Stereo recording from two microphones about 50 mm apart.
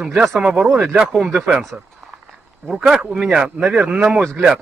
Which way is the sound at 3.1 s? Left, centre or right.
Centre.